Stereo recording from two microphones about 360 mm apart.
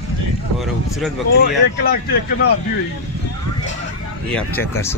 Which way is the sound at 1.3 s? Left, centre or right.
Left.